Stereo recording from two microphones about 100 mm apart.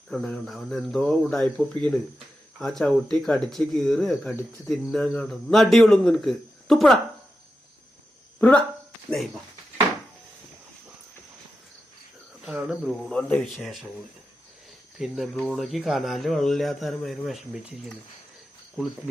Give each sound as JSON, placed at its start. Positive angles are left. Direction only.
{"t": 0.1, "sound": "speech", "side_deg": 0}
{"t": 8.4, "sound": "speech", "side_deg": 15}
{"t": 9.0, "sound": "a sound", "side_deg": 0}
{"t": 12.5, "sound": "speech", "side_deg": -5}
{"t": 14.9, "sound": "speech", "side_deg": -5}